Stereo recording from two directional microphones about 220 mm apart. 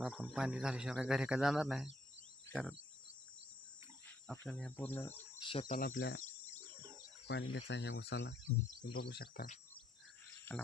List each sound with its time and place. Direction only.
0.0 s speech: centre (ahead or behind)
2.5 s cricket: 5° right (ahead or behind)
4.3 s insect: 5° left (ahead or behind)
5.4 s speech: 25° left (ahead or behind)
5.6 s speech: 40° left (ahead or behind)
5.9 s speech: 60° left (ahead or behind)
7.3 s speech: 50° left (ahead or behind)
10.5 s insect: 10° left (ahead or behind)